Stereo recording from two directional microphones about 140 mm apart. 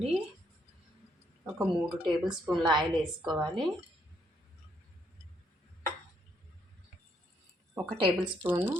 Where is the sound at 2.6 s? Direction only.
30° right (ahead or behind).